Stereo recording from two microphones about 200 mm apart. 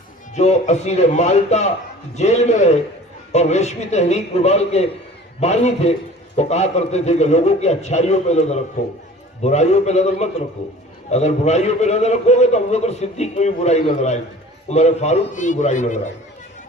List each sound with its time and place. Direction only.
0.3 s a man's voice: 35° left (ahead or behind)